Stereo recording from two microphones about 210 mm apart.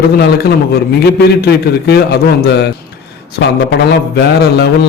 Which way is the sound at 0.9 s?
50° left (ahead or behind).